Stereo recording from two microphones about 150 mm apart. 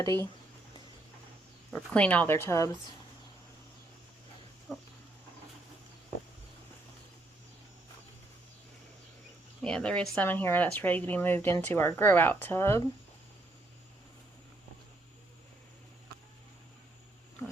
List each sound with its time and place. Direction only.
0.0 s speech: 20° left (ahead or behind)
1.7 s speech: 5° left (ahead or behind)
4.7 s dog: centre (ahead or behind)
9.6 s speech: 5° left (ahead or behind)